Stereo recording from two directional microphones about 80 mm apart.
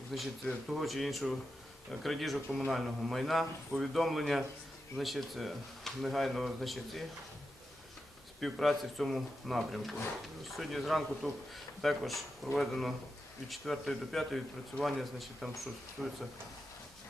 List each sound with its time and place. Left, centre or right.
0.1 s a man's voice: centre
8.4 s a man's voice: centre